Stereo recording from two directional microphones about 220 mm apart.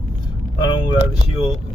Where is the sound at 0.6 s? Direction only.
20° left (ahead or behind).